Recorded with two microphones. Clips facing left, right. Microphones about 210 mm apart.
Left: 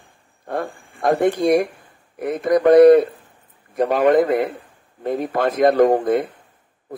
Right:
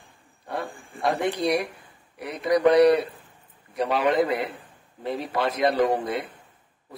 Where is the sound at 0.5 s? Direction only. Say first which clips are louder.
Left 6 dB; 50° left (ahead or behind).